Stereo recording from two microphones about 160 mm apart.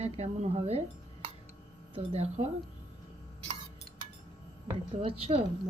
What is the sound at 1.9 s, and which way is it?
Speech, 40° right (ahead or behind).